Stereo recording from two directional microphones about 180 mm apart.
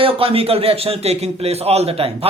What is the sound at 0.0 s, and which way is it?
A man's voice, 30° right (ahead or behind).